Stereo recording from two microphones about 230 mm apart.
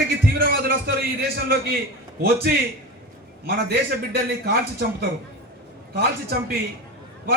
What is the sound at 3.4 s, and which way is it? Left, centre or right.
A man's voice, right.